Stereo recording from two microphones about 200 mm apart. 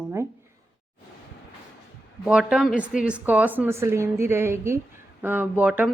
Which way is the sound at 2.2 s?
5° right (ahead or behind).